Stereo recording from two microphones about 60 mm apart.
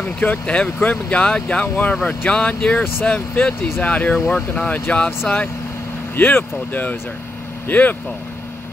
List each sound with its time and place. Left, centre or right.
0.2 s speech: left
6.1 s speech: left